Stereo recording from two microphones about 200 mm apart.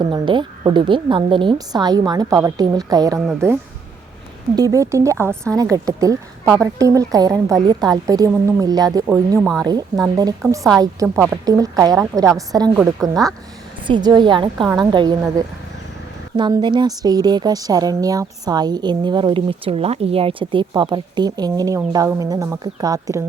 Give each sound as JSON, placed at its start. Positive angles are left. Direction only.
{"t": 0.0, "sound": "speech", "side_deg": -20}
{"t": 9.4, "sound": "a woman's voice", "side_deg": 0}
{"t": 9.6, "sound": "speech", "side_deg": -20}
{"t": 12.7, "sound": "a woman's voice", "side_deg": 0}
{"t": 13.8, "sound": "speech", "side_deg": -20}
{"t": 16.4, "sound": "speech", "side_deg": -20}